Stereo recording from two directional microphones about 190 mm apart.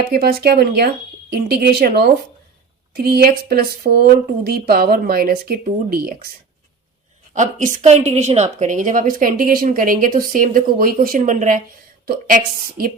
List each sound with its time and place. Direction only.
0.0 s speech: 55° right (ahead or behind)
7.3 s speech: 40° right (ahead or behind)